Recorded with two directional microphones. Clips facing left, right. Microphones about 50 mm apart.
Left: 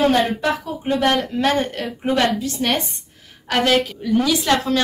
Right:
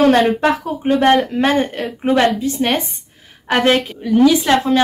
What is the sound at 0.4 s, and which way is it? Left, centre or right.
Speech, right.